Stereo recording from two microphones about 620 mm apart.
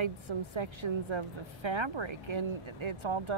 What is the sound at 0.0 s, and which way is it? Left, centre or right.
A woman's voice, right.